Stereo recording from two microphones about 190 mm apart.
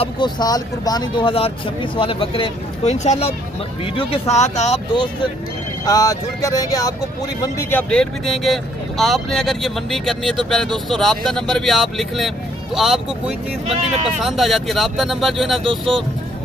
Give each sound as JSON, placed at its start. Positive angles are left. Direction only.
{"t": 0.0, "sound": "speech", "side_deg": 25}
{"t": 5.9, "sound": "speech", "side_deg": 20}
{"t": 7.5, "sound": "speech", "side_deg": 5}
{"t": 14.2, "sound": "speech", "side_deg": 0}